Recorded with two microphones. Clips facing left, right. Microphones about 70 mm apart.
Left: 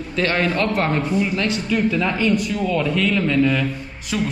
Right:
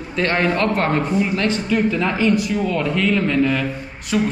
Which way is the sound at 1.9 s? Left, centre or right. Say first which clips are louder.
Right 1 dB; centre.